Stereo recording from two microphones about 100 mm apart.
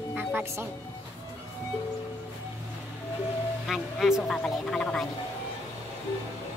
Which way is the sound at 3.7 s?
5° right (ahead or behind).